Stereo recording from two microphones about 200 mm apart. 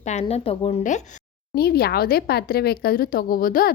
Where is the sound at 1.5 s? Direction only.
50° left (ahead or behind).